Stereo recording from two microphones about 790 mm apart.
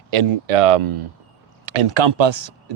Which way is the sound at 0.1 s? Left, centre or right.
Right.